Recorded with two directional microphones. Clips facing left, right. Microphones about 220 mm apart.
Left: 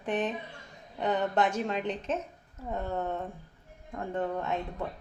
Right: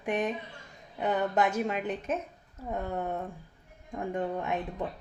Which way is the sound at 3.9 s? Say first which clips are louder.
Even; 15° right (ahead or behind).